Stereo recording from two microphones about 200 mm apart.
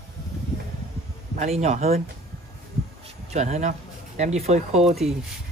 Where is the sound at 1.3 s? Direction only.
35° right (ahead or behind).